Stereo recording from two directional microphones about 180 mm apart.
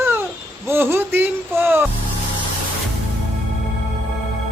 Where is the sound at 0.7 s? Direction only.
15° right (ahead or behind).